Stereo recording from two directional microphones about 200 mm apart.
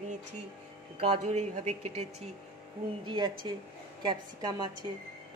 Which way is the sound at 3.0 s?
25° right (ahead or behind).